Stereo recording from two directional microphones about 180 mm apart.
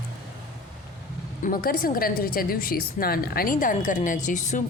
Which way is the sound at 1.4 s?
55° left (ahead or behind).